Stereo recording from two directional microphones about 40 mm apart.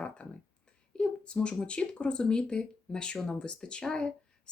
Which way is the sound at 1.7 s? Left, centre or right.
Left.